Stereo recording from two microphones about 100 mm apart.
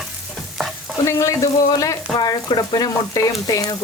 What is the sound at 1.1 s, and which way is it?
Frying, 30° left (ahead or behind).